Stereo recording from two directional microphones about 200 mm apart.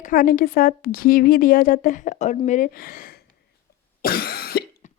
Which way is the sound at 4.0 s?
50° left (ahead or behind).